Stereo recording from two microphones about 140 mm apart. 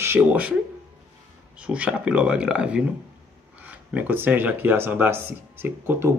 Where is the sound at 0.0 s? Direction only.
15° right (ahead or behind).